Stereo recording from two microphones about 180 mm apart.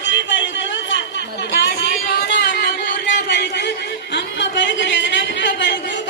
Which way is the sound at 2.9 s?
70° left (ahead or behind).